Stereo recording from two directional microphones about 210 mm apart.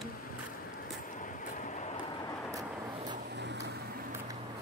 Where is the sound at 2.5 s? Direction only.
15° right (ahead or behind).